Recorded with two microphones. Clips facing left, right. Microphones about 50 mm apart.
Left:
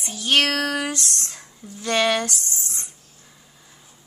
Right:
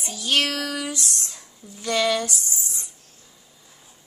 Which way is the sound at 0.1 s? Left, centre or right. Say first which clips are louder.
Left 3 dB; left.